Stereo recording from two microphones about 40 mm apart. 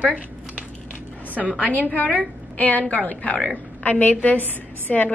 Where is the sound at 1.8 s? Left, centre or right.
Left.